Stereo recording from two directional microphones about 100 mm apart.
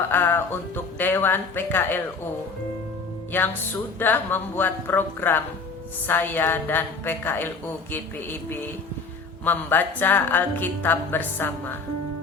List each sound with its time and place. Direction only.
0.1 s speech: 20° left (ahead or behind)
3.3 s a woman's voice: 20° left (ahead or behind)